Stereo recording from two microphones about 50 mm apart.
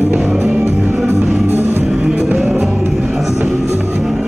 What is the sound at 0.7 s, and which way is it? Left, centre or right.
Music, right.